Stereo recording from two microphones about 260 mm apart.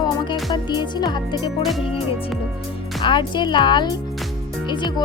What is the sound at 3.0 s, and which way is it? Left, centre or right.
Speech, centre.